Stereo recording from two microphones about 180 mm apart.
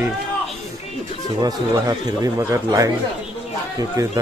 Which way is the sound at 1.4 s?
20° right (ahead or behind).